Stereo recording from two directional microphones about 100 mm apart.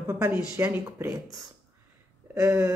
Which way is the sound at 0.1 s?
25° right (ahead or behind).